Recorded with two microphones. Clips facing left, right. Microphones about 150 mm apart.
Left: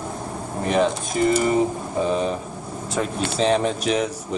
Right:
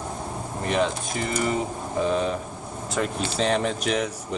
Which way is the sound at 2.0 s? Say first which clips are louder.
Left 1 dB; 5° left (ahead or behind).